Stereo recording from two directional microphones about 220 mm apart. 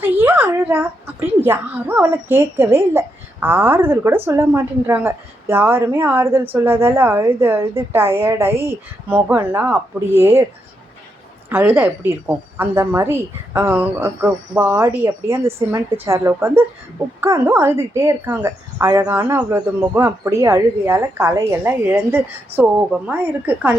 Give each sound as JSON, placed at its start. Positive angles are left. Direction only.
{"t": 0.0, "sound": "a sound", "side_deg": -10}
{"t": 1.4, "sound": "speech", "side_deg": -10}
{"t": 11.4, "sound": "a woman's voice", "side_deg": -10}